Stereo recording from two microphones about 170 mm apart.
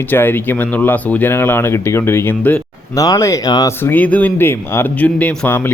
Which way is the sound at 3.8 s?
10° left (ahead or behind).